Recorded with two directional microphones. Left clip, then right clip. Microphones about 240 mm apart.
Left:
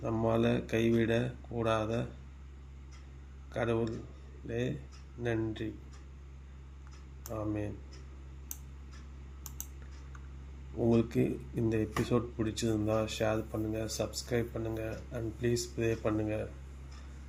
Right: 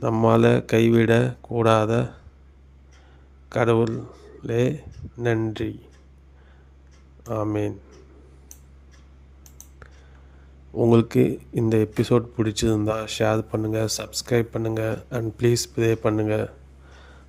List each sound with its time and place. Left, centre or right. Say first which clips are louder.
0.0 s speech: right 12 dB; right
3.5 s speech: right 13 dB; right
7.3 s speech: right 12 dB; right
10.8 s speech: right 11 dB; right